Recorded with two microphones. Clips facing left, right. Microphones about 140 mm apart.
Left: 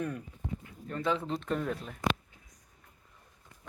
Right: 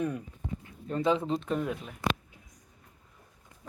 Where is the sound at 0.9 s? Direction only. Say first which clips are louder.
Right 4 dB; 20° right (ahead or behind).